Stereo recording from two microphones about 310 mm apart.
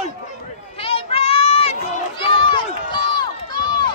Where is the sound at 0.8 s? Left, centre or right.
Centre.